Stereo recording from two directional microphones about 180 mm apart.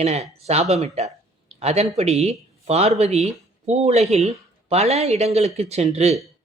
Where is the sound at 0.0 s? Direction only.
35° right (ahead or behind).